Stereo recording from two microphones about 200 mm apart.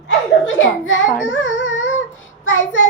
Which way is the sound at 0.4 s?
70° left (ahead or behind).